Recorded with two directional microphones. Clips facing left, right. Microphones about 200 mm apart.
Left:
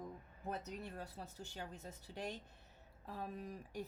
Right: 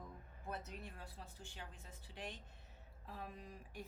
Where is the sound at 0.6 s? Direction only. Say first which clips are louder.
Left 5 dB; 40° left (ahead or behind).